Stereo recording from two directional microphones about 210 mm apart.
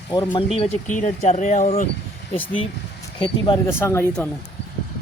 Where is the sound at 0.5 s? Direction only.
30° left (ahead or behind).